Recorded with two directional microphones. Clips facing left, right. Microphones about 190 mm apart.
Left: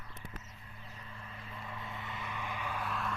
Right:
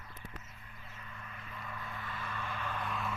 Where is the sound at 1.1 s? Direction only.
30° left (ahead or behind).